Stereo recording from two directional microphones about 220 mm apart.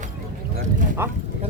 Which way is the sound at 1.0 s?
10° right (ahead or behind).